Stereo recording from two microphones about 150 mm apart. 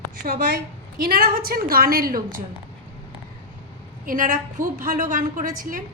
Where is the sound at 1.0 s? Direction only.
90° right.